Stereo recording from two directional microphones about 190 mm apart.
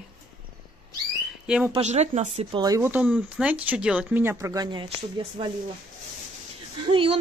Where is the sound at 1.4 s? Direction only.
5° right (ahead or behind).